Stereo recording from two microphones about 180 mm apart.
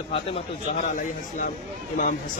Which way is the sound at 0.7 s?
45° left (ahead or behind).